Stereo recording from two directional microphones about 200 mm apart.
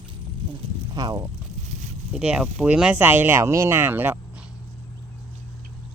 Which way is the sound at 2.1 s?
5° right (ahead or behind).